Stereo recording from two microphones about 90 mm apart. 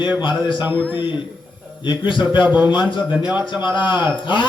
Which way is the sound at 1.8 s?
60° left (ahead or behind).